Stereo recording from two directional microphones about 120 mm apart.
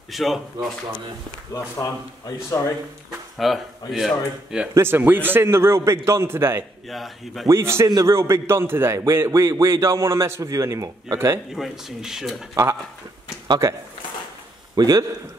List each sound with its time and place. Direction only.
0.1 s speech: centre (ahead or behind)
1.8 s speech: 25° left (ahead or behind)
3.1 s a sound: centre (ahead or behind)
3.9 s speech: 5° right (ahead or behind)
4.7 s a man's voice: 15° right (ahead or behind)
6.9 s speech: centre (ahead or behind)
7.4 s a man's voice: 20° right (ahead or behind)
11.5 s speech: centre (ahead or behind)
14.8 s a man's voice: 30° right (ahead or behind)